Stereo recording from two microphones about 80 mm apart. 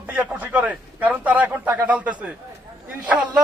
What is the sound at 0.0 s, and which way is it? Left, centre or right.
A man's voice, centre.